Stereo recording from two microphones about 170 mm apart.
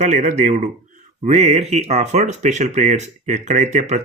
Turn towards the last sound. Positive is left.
turn(degrees=-45)  # may be behind; listen again after turning